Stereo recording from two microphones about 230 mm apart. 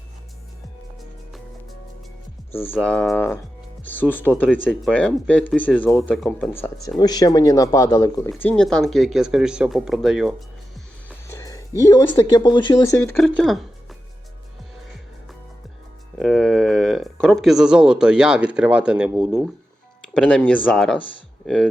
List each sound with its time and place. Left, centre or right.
2.7 s speech: centre
11.3 s a sound: centre
11.9 s speech: centre
13.1 s speech: centre
16.1 s speech: centre